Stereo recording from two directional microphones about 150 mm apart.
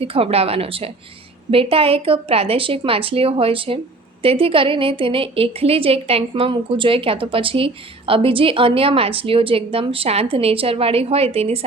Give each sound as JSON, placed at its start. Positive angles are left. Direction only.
{"t": 0.0, "sound": "a woman's voice", "side_deg": -40}